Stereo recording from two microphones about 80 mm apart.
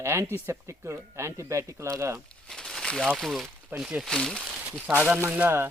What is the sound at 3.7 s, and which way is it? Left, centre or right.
Speech, centre.